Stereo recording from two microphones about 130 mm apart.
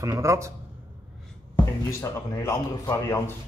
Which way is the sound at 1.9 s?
20° left (ahead or behind).